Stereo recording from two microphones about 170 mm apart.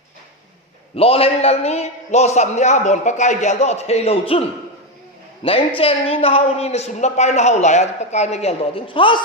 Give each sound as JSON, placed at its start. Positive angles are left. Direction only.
{"t": 0.9, "sound": "a woman's voice", "side_deg": 35}